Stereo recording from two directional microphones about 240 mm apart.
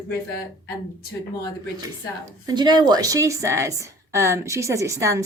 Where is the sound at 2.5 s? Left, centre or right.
Centre.